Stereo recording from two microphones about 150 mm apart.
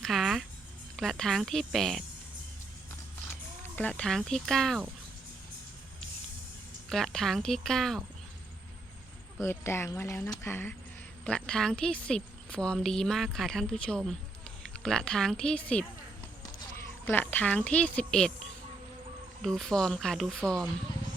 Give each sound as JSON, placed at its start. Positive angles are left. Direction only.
{"t": 0.0, "sound": "speech", "side_deg": 0}
{"t": 3.8, "sound": "speech", "side_deg": 5}
{"t": 6.9, "sound": "speech", "side_deg": 0}
{"t": 9.4, "sound": "speech", "side_deg": 15}
{"t": 17.1, "sound": "speech", "side_deg": 10}
{"t": 19.4, "sound": "speech", "side_deg": 0}